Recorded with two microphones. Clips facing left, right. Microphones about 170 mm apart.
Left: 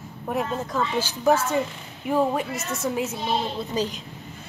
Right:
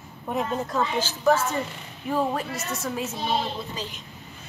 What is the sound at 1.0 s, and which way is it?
Speech, 15° left (ahead or behind).